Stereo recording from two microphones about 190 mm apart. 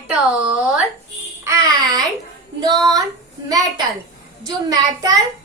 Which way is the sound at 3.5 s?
20° right (ahead or behind).